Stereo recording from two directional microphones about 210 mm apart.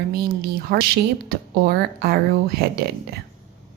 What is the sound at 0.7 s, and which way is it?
Speech, 45° right (ahead or behind).